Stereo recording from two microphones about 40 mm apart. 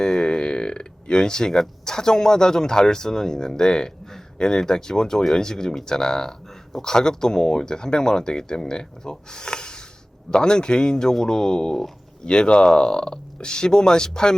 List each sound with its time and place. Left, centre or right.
0.0 s speech: centre